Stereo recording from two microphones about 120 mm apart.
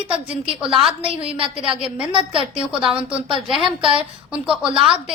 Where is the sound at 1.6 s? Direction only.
5° right (ahead or behind).